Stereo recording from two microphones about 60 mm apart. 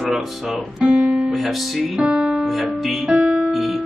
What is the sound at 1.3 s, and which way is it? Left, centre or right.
Speech, centre.